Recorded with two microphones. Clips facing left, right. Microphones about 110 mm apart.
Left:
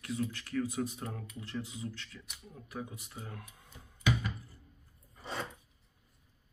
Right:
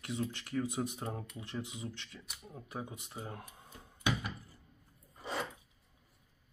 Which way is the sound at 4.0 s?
20° right (ahead or behind).